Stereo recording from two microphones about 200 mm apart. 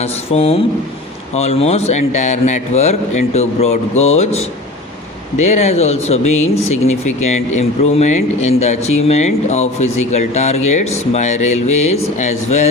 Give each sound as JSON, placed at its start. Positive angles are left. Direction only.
{"t": 0.0, "sound": "speech", "side_deg": 30}
{"t": 5.5, "sound": "speech", "side_deg": 35}
{"t": 6.3, "sound": "speech", "side_deg": 90}
{"t": 7.5, "sound": "speech", "side_deg": 35}